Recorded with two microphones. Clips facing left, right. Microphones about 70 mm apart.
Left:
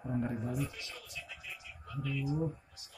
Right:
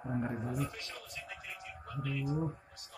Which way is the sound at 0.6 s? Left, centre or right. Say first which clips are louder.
Right 1 dB; right.